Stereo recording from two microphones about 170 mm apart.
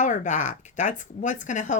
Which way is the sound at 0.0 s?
45° left (ahead or behind).